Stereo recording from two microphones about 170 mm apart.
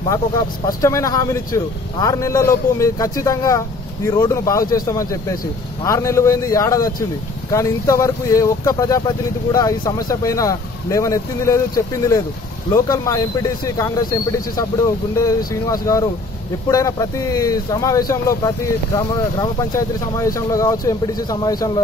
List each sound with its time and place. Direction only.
0.1 s speech: 20° left (ahead or behind)